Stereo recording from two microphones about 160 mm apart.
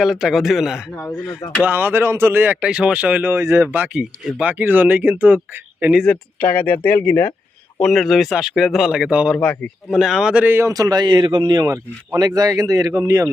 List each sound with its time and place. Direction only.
0.0 s speech: centre (ahead or behind)
1.3 s speech: 20° left (ahead or behind)
1.6 s speech: 10° right (ahead or behind)
6.0 s speech: 10° left (ahead or behind)
7.8 s speech: centre (ahead or behind); by 13.2 s 20° right (ahead or behind)